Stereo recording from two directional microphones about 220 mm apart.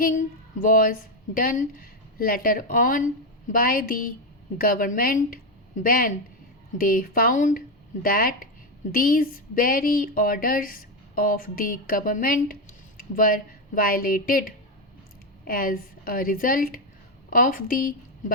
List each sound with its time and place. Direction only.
0.0 s speech: 35° left (ahead or behind)